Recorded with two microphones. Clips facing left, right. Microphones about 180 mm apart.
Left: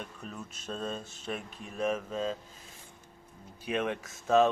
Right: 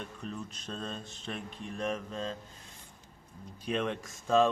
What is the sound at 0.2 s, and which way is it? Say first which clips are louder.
Speech: right 3 dB; 5° left (ahead or behind).